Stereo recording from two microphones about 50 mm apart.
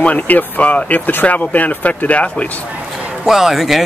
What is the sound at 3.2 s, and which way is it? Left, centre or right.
Speech, centre.